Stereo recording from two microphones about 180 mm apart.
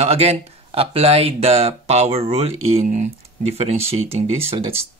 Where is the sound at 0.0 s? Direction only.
35° right (ahead or behind).